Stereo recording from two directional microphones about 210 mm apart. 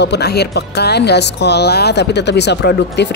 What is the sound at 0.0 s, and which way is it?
Speech, 50° left (ahead or behind).